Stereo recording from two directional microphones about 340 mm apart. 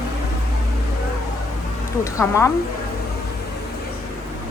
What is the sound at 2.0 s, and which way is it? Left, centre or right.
Speech, centre.